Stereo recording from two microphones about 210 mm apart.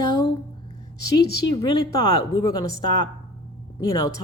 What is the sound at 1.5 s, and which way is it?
Speech, 20° left (ahead or behind).